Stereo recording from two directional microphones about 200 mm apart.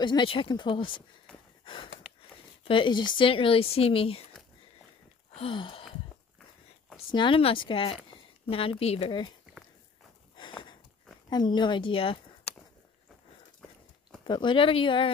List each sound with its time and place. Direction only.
0.0 s speech: 25° left (ahead or behind)
1.6 s snort: 25° left (ahead or behind)
2.6 s speech: 25° left (ahead or behind)
5.3 s a sound: 25° left (ahead or behind)
7.1 s speech: 25° left (ahead or behind)
10.3 s a sound: 25° left (ahead or behind)
11.2 s speech: 20° left (ahead or behind)
14.2 s speech: 25° left (ahead or behind)